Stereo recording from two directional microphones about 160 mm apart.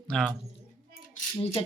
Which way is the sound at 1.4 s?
35° left (ahead or behind).